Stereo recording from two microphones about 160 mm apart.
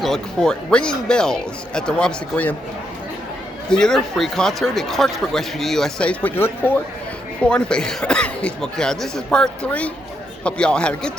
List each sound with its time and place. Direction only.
0.0 s speech: 5° left (ahead or behind)
3.7 s speech: 5° left (ahead or behind)